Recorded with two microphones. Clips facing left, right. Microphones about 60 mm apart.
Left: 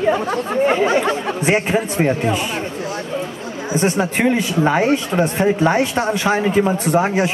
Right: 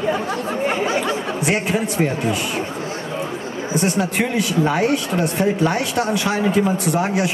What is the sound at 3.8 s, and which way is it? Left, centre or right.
Speech, left.